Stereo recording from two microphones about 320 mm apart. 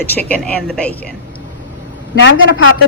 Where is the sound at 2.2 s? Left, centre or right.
Left.